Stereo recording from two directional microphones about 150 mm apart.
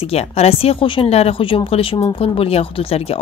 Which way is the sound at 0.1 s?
40° left (ahead or behind).